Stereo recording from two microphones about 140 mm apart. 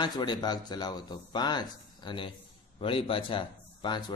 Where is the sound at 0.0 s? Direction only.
30° left (ahead or behind).